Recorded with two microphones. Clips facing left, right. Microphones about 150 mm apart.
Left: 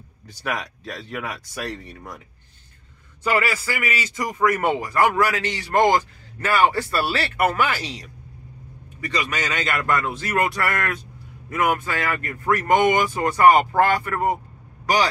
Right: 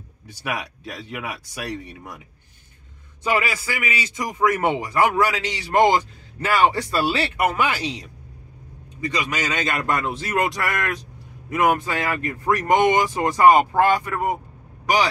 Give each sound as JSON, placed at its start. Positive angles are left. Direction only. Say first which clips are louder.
{"t": 0.5, "sound": "speech", "louder": "left 1 dB", "side_deg": -10}
{"t": 3.3, "sound": "a man's voice", "louder": "left 1 dB", "side_deg": -20}
{"t": 9.0, "sound": "a man's voice", "louder": "right 1 dB", "side_deg": -15}